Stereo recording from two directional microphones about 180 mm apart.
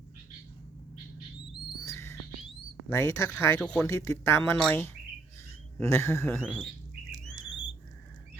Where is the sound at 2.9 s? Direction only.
15° left (ahead or behind).